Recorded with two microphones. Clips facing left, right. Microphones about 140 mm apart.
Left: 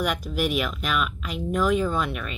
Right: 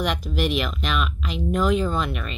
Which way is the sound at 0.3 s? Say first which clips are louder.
Right 1 dB; 5° left (ahead or behind).